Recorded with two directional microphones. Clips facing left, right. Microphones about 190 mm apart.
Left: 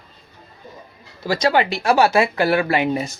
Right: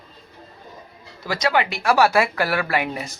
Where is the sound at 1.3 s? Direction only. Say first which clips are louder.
Left 4 dB; 30° left (ahead or behind).